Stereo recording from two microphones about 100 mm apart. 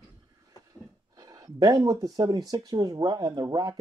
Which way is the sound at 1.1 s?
40° right (ahead or behind).